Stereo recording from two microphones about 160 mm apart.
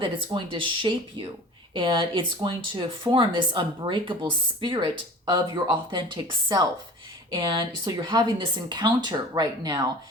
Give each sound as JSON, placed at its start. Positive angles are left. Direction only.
{"t": 0.3, "sound": "speech", "side_deg": -30}